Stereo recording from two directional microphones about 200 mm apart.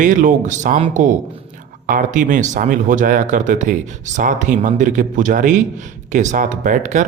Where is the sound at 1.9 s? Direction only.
40° right (ahead or behind).